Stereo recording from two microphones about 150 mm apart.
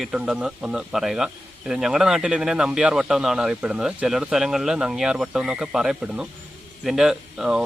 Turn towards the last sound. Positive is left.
turn(degrees=-5)  # may be behind; listen again after turning